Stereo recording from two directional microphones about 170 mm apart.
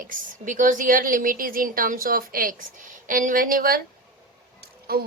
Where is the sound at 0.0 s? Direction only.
50° right (ahead or behind).